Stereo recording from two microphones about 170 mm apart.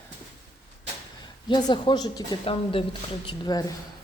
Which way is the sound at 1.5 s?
25° left (ahead or behind).